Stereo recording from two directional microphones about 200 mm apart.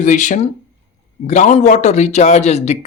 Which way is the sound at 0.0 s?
40° left (ahead or behind).